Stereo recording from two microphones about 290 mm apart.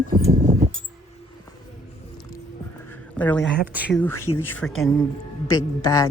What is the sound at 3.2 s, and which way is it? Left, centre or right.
Speech, centre.